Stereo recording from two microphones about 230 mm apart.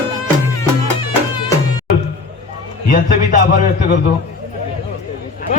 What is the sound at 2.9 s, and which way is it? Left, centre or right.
Speech, left.